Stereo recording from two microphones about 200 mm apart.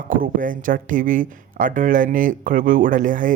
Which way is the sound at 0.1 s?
40° right (ahead or behind).